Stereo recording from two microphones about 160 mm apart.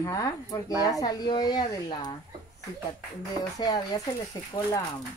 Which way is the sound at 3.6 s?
25° left (ahead or behind).